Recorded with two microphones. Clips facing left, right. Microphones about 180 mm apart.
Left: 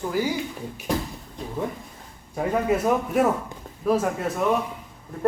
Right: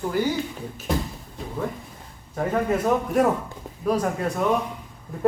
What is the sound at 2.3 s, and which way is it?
A man's voice, 10° left (ahead or behind).